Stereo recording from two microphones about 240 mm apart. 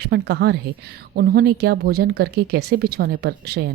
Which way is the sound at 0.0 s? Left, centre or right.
Right.